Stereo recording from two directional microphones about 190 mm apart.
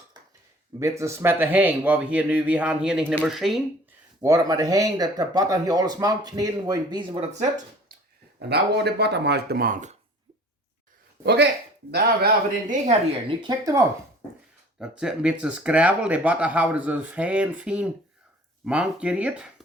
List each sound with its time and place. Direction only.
0.8 s speech: 15° right (ahead or behind)
4.2 s speech: 20° right (ahead or behind)
8.4 s speech: 60° right (ahead or behind)
11.2 s speech: 60° right (ahead or behind)
12.6 s a woman's voice: 40° right (ahead or behind)
13.2 s speech: 25° right (ahead or behind)
14.8 s speech: 5° right (ahead or behind)